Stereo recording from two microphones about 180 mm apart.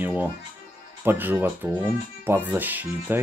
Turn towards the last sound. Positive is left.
turn(degrees=-10)  # may be behind; listen again after turning